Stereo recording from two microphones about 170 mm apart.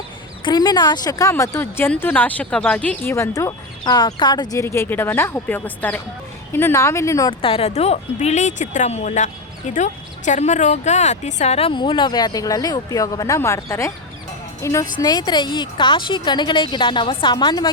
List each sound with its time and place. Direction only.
0.4 s speech: 25° left (ahead or behind)
7.4 s a woman's voice: 35° left (ahead or behind)